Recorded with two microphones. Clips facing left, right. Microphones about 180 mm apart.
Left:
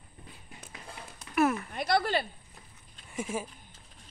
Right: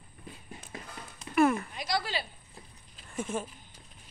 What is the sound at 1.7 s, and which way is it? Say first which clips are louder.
Speech: left 5 dB; 55° left (ahead or behind).